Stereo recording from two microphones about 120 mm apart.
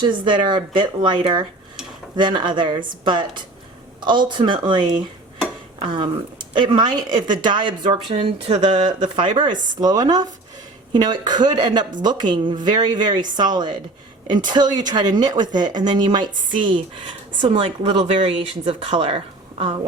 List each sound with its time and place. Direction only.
0.0 s speech: 40° right (ahead or behind)
8.1 s speech: 55° right (ahead or behind)
17.4 s speech: 50° right (ahead or behind)
18.0 s speech: 70° right (ahead or behind)
18.3 s speech: 50° right (ahead or behind)